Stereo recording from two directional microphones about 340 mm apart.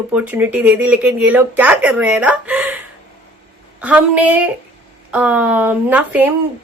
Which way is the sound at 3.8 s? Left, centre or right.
Centre.